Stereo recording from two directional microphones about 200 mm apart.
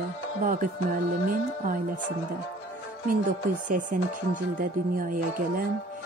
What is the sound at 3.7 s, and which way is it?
Speech, 40° right (ahead or behind).